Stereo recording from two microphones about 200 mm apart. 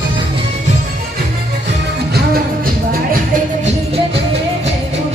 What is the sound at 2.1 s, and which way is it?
Music, 50° right (ahead or behind).